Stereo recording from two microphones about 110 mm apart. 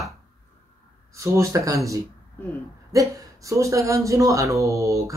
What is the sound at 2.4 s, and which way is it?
Speech, 15° left (ahead or behind).